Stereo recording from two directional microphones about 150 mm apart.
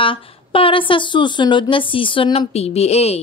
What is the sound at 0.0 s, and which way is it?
A woman's voice, 35° left (ahead or behind).